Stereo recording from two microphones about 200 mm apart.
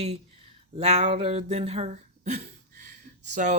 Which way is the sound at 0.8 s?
35° right (ahead or behind).